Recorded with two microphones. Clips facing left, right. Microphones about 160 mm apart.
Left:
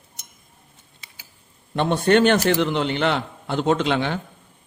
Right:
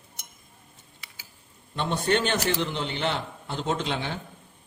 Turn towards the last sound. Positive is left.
turn(degrees=70)  # may be behind; listen again after turning